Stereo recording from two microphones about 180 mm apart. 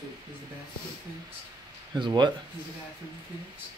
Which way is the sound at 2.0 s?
25° right (ahead or behind).